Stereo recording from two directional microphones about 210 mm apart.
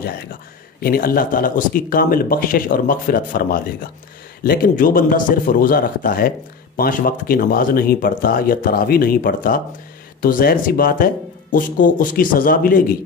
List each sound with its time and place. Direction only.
0.7 s a man's voice: 45° left (ahead or behind)